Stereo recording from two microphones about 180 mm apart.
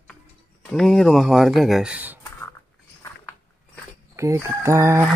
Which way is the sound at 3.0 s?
10° left (ahead or behind).